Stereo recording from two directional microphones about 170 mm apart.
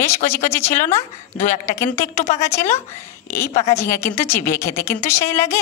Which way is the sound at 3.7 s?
15° left (ahead or behind).